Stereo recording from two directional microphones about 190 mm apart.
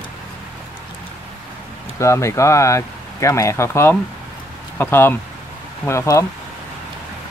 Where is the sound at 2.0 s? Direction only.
15° left (ahead or behind).